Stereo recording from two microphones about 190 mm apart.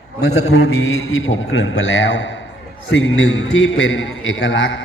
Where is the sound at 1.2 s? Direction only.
90° left; by 2.3 s 75° left (ahead or behind).